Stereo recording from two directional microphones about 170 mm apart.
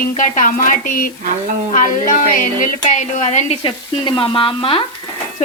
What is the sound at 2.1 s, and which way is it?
A woman's voice, 50° left (ahead or behind).